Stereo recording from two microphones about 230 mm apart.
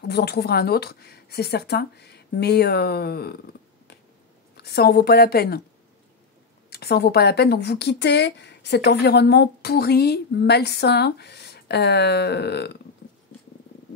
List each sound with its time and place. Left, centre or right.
0.1 s speech: left
4.6 s speech: left
6.7 s speech: left